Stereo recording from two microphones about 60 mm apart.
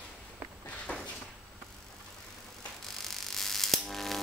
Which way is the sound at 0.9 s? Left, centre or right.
Left.